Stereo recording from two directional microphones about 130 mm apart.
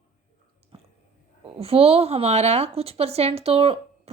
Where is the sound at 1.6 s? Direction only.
50° right (ahead or behind).